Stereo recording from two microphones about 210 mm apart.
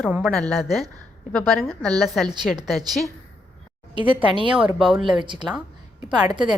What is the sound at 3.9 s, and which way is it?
A woman's voice, 25° right (ahead or behind).